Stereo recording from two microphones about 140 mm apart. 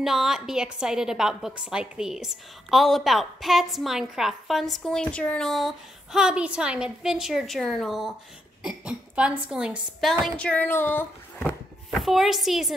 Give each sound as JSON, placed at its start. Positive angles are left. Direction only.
{"t": 0.0, "sound": "a woman's voice", "side_deg": 0}
{"t": 11.9, "sound": "a woman's voice", "side_deg": 0}